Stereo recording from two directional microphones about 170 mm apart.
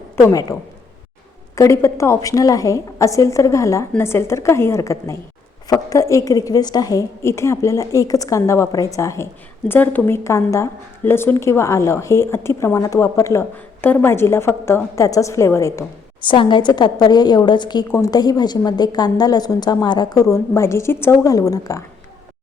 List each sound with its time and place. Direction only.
0.2 s a woman's voice: 20° left (ahead or behind)
1.5 s a woman's voice: 15° left (ahead or behind)
16.2 s a woman's voice: 30° left (ahead or behind)